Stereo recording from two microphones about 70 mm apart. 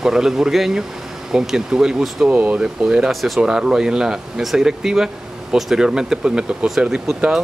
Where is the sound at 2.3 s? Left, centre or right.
Right.